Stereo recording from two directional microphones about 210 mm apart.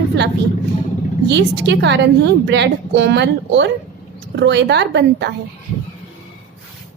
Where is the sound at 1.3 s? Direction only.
55° right (ahead or behind).